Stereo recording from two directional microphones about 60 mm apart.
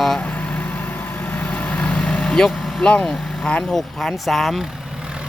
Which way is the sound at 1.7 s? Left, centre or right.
Left.